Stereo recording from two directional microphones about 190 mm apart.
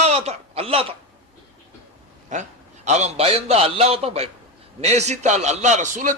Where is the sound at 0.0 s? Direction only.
35° right (ahead or behind).